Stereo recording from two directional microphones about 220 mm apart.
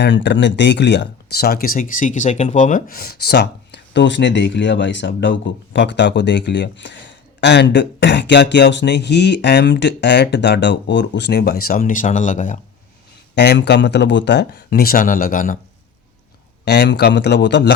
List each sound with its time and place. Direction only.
0.0 s speech: 55° left (ahead or behind); by 12.5 s 35° left (ahead or behind)
13.3 s speech: 50° left (ahead or behind)
16.6 s speech: 50° left (ahead or behind)